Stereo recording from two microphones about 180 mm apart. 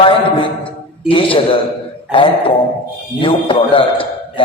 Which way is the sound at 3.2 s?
30° left (ahead or behind).